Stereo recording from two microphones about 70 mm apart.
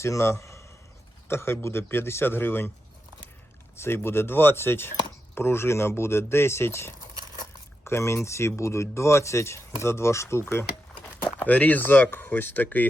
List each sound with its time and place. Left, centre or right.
0.0 s a man's voice: left
3.8 s speech: left
11.3 s speech: left